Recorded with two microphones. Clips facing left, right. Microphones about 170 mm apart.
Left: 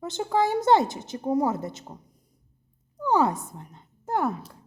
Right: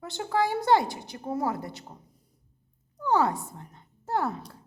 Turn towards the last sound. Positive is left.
turn(degrees=20)  # may be behind; listen again after turning